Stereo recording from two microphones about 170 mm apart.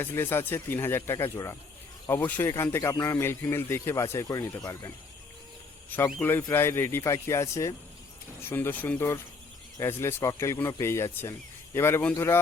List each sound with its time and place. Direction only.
0.0 s speech: 15° left (ahead or behind)
5.9 s speech: 10° left (ahead or behind)